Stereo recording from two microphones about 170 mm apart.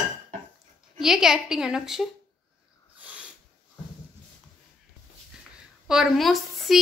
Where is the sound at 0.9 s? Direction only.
5° right (ahead or behind).